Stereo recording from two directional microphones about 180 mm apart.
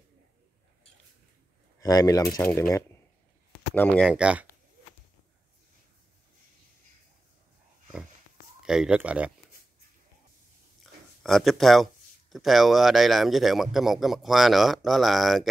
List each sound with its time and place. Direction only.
1.8 s speech: 20° left (ahead or behind)
3.7 s speech: 10° left (ahead or behind)
4.0 s speech: 5° right (ahead or behind)
8.6 s speech: 5° right (ahead or behind)
10.8 s speech: centre (ahead or behind)